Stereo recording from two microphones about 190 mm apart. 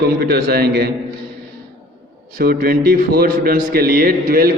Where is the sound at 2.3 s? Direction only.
50° right (ahead or behind).